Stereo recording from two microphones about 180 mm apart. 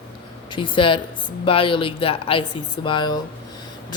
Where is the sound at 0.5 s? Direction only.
30° left (ahead or behind).